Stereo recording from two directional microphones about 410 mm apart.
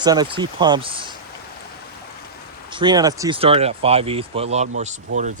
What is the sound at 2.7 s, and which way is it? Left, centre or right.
Speech, centre.